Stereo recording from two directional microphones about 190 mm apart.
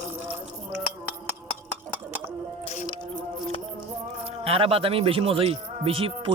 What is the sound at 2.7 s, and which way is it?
Music, 30° left (ahead or behind).